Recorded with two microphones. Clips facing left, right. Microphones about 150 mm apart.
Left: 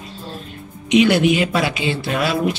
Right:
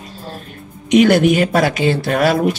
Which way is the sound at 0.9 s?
45° right (ahead or behind).